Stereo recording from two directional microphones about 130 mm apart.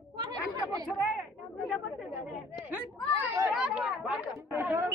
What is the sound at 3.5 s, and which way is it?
A woman's voice, 5° right (ahead or behind).